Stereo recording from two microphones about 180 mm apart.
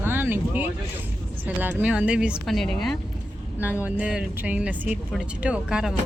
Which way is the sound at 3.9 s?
5° right (ahead or behind).